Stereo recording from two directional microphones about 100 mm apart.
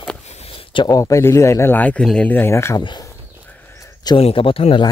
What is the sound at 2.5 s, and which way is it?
Speech, 30° left (ahead or behind).